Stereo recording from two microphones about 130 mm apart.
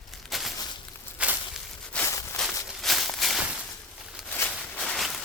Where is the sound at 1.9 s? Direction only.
10° left (ahead or behind).